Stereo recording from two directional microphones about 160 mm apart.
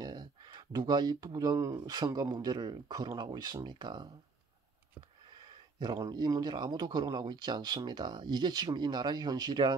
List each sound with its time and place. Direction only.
0.0 s speech: 25° right (ahead or behind)
5.4 s speech: 25° right (ahead or behind)